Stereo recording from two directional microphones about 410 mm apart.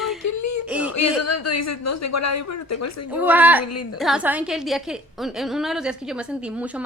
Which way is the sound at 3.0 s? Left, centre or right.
Centre.